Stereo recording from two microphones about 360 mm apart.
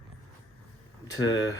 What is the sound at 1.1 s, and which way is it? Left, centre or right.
Speech, left.